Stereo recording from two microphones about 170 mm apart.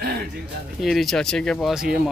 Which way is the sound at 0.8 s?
Centre (ahead or behind).